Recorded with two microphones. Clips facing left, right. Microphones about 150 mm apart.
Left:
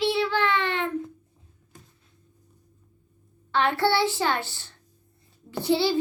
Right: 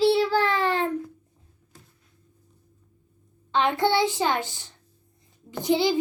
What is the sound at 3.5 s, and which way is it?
A child's voice, 20° right (ahead or behind).